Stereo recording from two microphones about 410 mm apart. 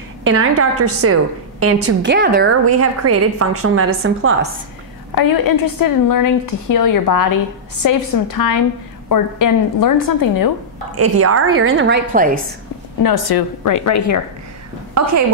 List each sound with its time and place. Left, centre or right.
0.2 s a woman's voice: right
1.9 s a woman's voice: right
5.1 s a woman's voice: left
11.0 s a woman's voice: right; by 12.4 s centre
13.0 s a woman's voice: left
15.0 s a woman's voice: right